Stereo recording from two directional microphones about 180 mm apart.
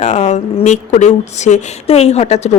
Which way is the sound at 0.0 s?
35° left (ahead or behind).